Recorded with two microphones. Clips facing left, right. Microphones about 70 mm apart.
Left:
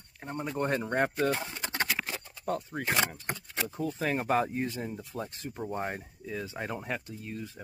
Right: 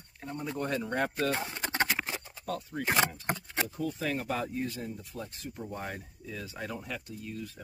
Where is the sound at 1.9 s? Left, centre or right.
Centre.